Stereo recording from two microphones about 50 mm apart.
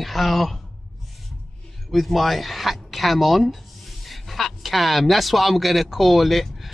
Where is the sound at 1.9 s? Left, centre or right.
Centre.